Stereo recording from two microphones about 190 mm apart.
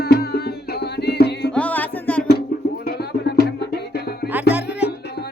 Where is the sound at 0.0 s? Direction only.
55° left (ahead or behind).